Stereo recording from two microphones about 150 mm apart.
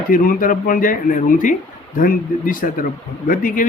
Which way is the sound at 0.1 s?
65° left (ahead or behind).